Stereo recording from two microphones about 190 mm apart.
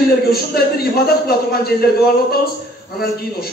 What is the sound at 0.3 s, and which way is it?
A man's voice, 55° left (ahead or behind).